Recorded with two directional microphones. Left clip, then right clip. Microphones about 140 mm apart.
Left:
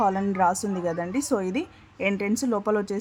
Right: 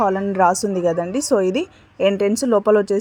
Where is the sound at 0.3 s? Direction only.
25° right (ahead or behind).